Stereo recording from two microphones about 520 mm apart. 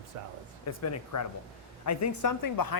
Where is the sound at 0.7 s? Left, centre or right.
Left.